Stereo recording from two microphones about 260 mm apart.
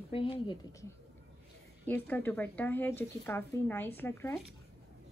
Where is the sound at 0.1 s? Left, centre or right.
Centre.